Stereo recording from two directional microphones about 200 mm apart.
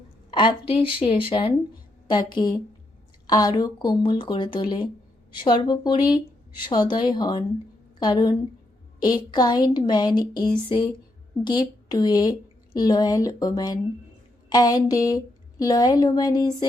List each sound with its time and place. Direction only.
0.3 s speech: 25° left (ahead or behind)